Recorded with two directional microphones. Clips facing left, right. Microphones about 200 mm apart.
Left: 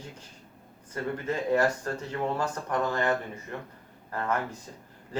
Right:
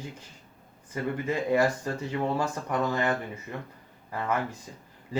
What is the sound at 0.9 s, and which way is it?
Speech, 10° right (ahead or behind).